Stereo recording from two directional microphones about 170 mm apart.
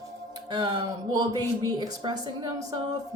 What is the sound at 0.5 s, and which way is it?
Speech, 25° right (ahead or behind).